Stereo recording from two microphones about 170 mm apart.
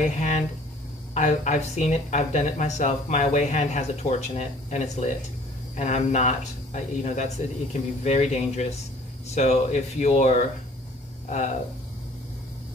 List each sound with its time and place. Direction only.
0.0 s speech: 45° left (ahead or behind)